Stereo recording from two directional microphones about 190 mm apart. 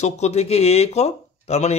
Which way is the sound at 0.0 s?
35° left (ahead or behind).